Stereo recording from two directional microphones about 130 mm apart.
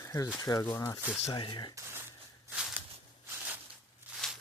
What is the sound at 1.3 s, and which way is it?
Speech, 35° left (ahead or behind).